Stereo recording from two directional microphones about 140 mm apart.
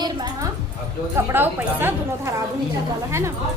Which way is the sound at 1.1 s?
15° right (ahead or behind).